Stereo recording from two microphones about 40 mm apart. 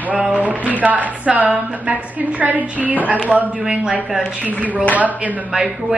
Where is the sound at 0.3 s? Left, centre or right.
Right.